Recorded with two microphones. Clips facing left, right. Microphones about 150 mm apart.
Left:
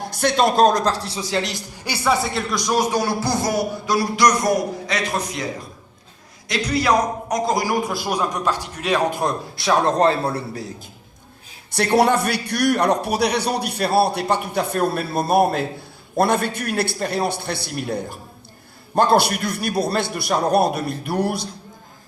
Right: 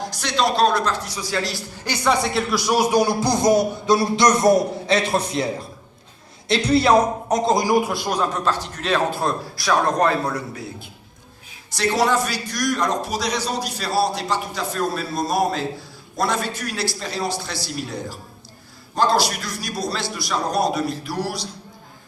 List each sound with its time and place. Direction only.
0.0 s a man's voice: 55° left (ahead or behind); by 5.5 s 30° right (ahead or behind)
6.5 s a man's voice: 30° right (ahead or behind)
7.8 s a man's voice: centre (ahead or behind)
8.0 s a man's voice: 10° left (ahead or behind); by 10.7 s 35° left (ahead or behind)
11.7 s a man's voice: 60° left (ahead or behind)